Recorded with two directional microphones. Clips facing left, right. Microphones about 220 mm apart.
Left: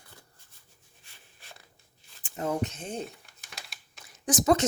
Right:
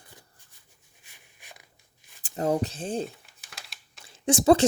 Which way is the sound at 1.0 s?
15° right (ahead or behind).